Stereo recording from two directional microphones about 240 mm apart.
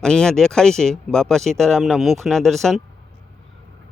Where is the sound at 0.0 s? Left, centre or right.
Centre.